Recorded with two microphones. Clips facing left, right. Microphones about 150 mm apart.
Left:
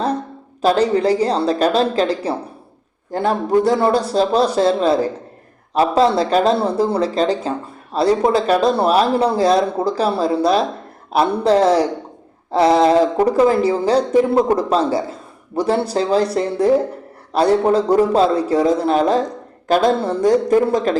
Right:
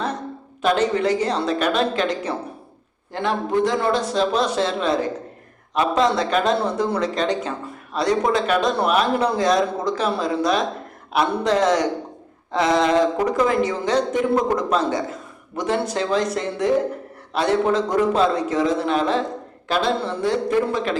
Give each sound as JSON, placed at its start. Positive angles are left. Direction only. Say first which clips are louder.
{"t": 0.6, "sound": "speech", "louder": "left 4 dB", "side_deg": 35}